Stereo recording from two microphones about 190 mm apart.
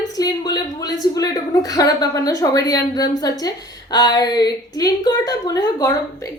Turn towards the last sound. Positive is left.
turn(degrees=20)  # may be behind; listen again after turning